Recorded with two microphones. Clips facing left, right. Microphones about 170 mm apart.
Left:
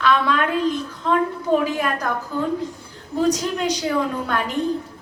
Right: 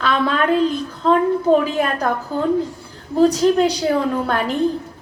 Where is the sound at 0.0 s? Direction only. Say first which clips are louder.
Even; 30° right (ahead or behind).